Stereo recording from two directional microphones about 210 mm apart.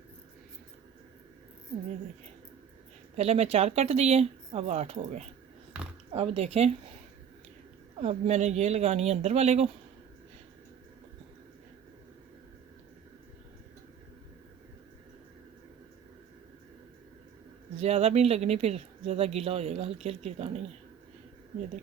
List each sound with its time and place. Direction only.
3.2 s speech: 30° right (ahead or behind)
8.0 s speech: 35° right (ahead or behind)
17.7 s speech: 30° right (ahead or behind)